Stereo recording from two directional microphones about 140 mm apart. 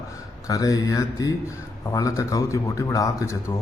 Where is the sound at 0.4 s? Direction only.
25° left (ahead or behind).